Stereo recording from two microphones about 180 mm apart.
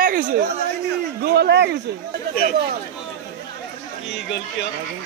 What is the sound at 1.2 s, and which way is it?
Speech, 65° right (ahead or behind).